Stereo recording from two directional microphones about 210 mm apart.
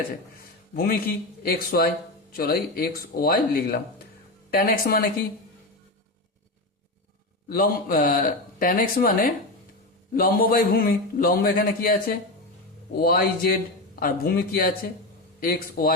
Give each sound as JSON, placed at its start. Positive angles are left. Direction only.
{"t": 0.3, "sound": "a man's voice", "side_deg": 45}
{"t": 7.5, "sound": "a man's voice", "side_deg": 45}